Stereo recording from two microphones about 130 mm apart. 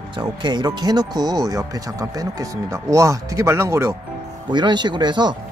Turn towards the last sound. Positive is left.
turn(degrees=-35)  # may be behind; listen again after turning